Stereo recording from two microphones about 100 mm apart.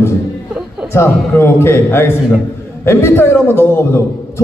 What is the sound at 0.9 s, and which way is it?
A man's voice, 25° left (ahead or behind).